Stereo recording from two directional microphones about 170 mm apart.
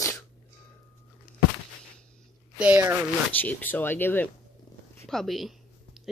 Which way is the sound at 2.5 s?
5° right (ahead or behind).